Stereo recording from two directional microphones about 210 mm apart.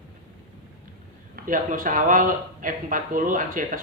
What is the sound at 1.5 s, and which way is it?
Speech, 40° right (ahead or behind).